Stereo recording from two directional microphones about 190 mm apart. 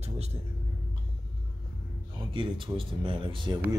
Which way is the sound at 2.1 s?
25° right (ahead or behind).